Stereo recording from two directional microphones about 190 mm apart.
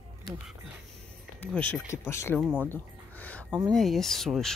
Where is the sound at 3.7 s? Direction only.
Centre (ahead or behind).